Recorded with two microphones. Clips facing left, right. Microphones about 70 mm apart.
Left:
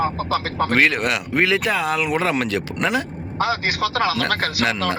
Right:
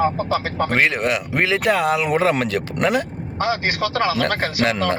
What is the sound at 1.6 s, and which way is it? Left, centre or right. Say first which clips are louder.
Speech: right 3 dB; right.